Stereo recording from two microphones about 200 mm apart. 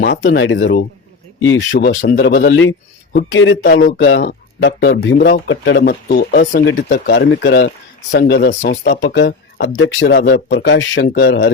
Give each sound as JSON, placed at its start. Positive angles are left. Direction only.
{"t": 0.0, "sound": "speech", "side_deg": 60}
{"t": 6.6, "sound": "speech", "side_deg": 60}